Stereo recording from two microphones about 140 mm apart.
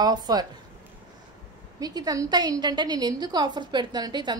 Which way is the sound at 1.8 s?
25° right (ahead or behind).